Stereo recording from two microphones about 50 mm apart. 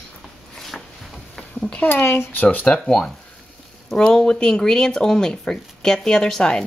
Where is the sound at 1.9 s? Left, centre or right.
Left.